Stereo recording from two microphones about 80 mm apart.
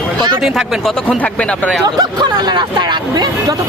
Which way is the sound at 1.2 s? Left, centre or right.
Centre.